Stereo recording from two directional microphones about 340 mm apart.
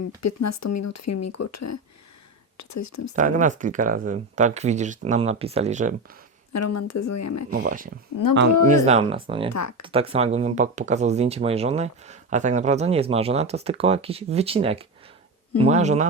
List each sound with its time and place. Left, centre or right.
0.2 s speech: left
3.2 s speech: right
6.5 s speech: left
7.5 s speech: right
8.2 s speech: left
8.8 s speech: centre
9.5 s speech: left
9.8 s speech: centre